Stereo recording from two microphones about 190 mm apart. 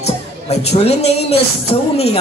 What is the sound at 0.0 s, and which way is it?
Speech, 35° left (ahead or behind).